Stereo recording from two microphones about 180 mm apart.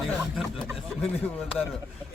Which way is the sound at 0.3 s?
Centre (ahead or behind).